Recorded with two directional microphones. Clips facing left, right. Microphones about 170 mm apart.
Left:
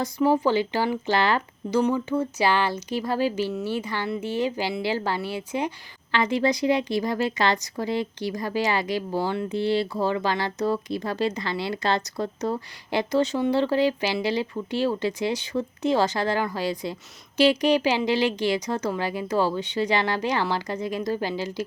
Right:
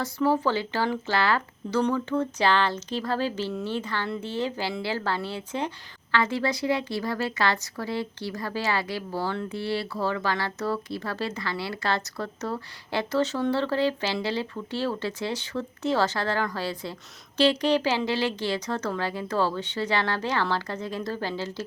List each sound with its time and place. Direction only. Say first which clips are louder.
0.0 s speech: left 3 dB; 15° left (ahead or behind)